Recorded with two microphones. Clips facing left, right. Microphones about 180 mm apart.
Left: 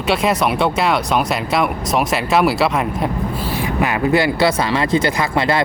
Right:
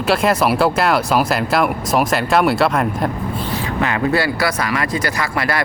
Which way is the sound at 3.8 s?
15° left (ahead or behind).